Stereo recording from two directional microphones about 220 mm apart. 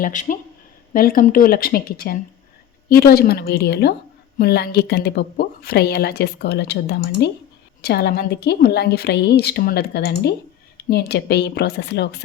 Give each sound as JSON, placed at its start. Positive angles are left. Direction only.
{"t": 0.0, "sound": "a woman's voice", "side_deg": 35}